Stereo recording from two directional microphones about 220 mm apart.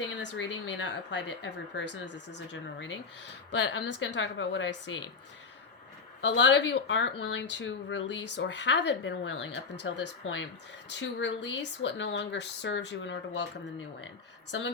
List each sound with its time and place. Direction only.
0.3 s speech: 55° left (ahead or behind)
6.2 s speech: 55° left (ahead or behind)